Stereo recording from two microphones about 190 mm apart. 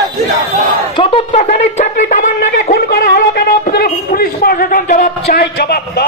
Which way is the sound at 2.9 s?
55° left (ahead or behind).